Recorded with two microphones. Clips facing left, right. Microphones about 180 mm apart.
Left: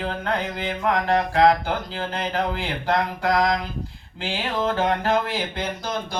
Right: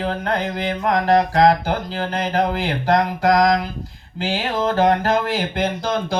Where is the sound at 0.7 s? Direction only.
40° right (ahead or behind).